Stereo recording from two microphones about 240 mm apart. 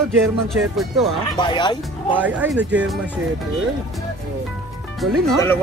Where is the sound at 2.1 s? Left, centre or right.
Centre.